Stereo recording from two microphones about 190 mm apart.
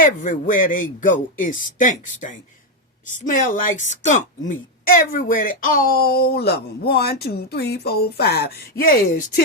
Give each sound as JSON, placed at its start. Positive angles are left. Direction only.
{"t": 0.0, "sound": "a woman's voice", "side_deg": 45}